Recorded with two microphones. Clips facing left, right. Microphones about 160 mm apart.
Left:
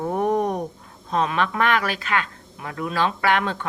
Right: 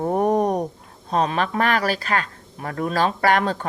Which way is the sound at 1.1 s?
35° right (ahead or behind).